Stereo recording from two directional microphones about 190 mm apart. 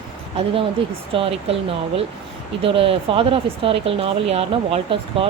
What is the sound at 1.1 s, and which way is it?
Speech, 30° right (ahead or behind).